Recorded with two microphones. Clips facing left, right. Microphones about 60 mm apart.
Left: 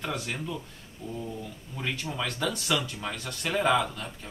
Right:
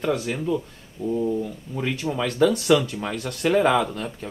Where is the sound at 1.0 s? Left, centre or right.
Right.